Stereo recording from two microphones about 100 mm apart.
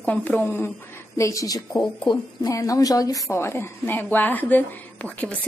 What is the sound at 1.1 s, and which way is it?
A woman's voice, 30° left (ahead or behind).